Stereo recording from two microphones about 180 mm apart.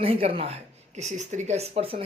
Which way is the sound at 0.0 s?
30° right (ahead or behind).